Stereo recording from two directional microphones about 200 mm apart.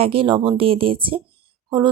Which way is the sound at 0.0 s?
25° right (ahead or behind).